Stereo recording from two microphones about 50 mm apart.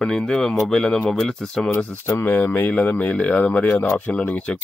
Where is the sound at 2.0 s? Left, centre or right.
Left.